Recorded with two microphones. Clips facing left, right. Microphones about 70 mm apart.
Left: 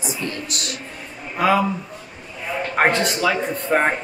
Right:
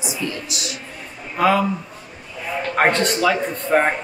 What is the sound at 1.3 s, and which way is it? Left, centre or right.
Speech, centre.